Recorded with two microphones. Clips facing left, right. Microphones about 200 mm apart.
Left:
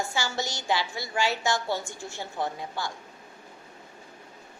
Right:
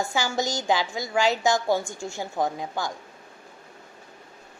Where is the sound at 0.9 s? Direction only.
15° right (ahead or behind).